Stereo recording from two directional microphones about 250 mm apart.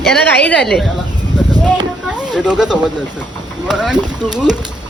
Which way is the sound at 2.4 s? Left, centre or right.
Centre.